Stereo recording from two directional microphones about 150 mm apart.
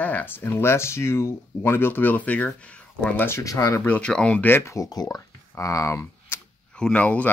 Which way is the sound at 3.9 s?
5° left (ahead or behind).